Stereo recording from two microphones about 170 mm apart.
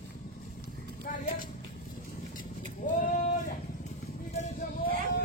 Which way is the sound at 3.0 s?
55° left (ahead or behind).